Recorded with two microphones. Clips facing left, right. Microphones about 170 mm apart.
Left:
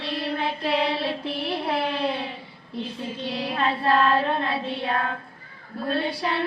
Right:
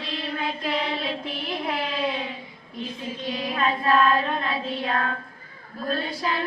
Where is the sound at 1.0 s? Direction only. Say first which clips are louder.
Left 2 dB; 70° left (ahead or behind).